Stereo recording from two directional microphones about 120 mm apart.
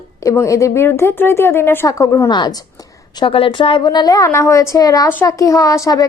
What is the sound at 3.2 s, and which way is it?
Speech, 50° left (ahead or behind).